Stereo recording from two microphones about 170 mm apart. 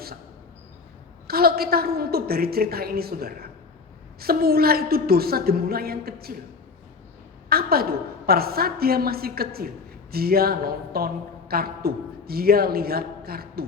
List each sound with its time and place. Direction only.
1.3 s a woman's voice: 65° right (ahead or behind)
7.5 s a woman's voice: 65° right (ahead or behind)